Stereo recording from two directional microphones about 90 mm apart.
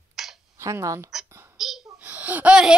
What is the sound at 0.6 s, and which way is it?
Speech, 35° right (ahead or behind).